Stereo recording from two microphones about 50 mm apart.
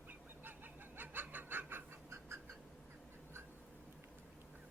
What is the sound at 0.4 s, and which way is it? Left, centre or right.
Chicken, right.